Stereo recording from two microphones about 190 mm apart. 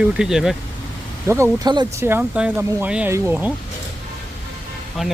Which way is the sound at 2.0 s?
10° right (ahead or behind).